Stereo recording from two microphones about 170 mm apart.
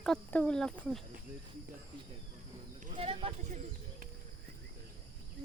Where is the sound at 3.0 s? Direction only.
35° right (ahead or behind).